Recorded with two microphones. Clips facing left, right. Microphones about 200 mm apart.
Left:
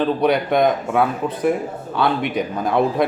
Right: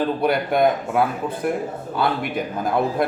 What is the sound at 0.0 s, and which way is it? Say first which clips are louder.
Speech: left 3 dB; 5° right (ahead or behind).